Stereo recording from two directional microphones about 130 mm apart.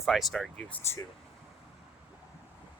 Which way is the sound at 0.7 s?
20° left (ahead or behind).